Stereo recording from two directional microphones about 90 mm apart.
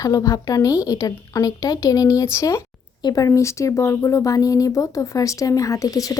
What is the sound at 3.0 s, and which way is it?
A woman's voice, 45° left (ahead or behind).